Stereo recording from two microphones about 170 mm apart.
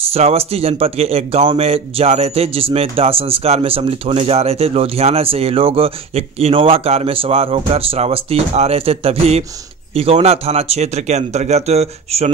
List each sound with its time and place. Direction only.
0.1 s a man's voice: 35° right (ahead or behind)